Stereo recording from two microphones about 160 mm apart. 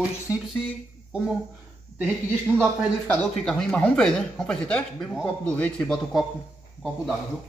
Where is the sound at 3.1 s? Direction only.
5° left (ahead or behind).